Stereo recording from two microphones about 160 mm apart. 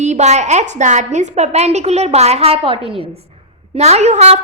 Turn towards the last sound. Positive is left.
turn(degrees=-45)  # may be behind; listen again after turning